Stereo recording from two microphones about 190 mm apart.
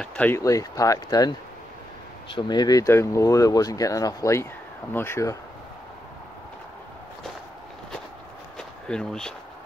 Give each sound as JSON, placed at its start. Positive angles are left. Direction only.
{"t": 0.0, "sound": "speech", "side_deg": 5}
{"t": 2.3, "sound": "speech", "side_deg": 20}
{"t": 8.5, "sound": "a sound", "side_deg": 5}